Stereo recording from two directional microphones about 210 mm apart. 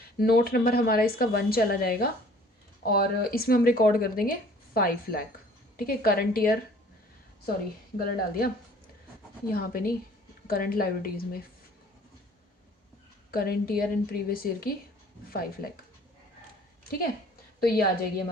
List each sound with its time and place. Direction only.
0.2 s speech: 45° left (ahead or behind)
7.9 s speech: 45° left (ahead or behind)
9.5 s speech: 45° left (ahead or behind)
13.3 s speech: 45° left (ahead or behind)
17.6 s a woman's voice: 50° left (ahead or behind)